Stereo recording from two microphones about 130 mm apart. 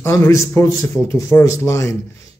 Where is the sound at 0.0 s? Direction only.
25° left (ahead or behind).